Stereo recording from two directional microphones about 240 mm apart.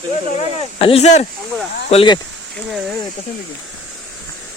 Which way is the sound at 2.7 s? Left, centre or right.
Centre.